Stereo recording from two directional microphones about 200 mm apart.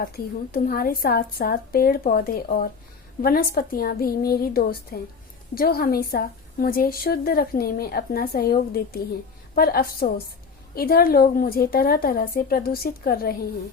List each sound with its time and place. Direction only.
0.0 s a woman's voice: 45° left (ahead or behind)